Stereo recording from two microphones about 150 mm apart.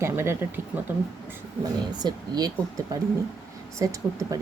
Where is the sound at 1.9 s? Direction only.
25° right (ahead or behind).